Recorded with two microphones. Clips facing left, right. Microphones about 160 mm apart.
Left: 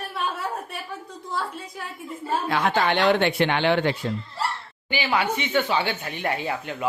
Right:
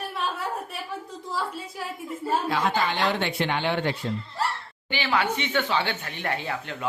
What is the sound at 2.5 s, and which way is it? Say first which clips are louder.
Speech: left 7 dB; 60° left (ahead or behind).